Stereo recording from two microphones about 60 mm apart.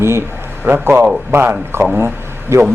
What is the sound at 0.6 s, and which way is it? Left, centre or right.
A man's voice, right.